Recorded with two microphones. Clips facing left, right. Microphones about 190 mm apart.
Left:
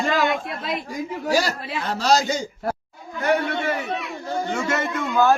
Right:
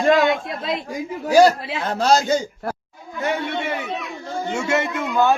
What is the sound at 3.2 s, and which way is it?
Chatter, 25° right (ahead or behind).